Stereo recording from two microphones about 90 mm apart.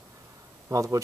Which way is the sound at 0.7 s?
35° right (ahead or behind).